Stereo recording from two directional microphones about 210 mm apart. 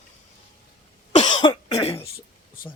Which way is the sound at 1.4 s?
20° left (ahead or behind).